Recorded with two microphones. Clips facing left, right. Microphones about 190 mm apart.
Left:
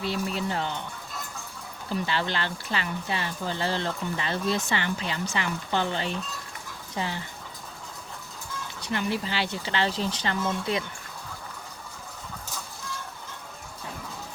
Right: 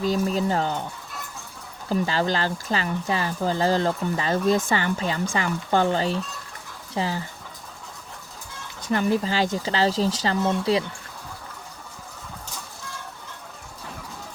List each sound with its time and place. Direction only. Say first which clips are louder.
0.0 s speech: right 6 dB; 40° right (ahead or behind)
1.9 s speech: right 5 dB; 40° right (ahead or behind)
8.8 s speech: right 7 dB; 40° right (ahead or behind)